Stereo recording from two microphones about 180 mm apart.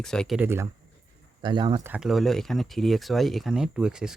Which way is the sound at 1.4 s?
25° right (ahead or behind).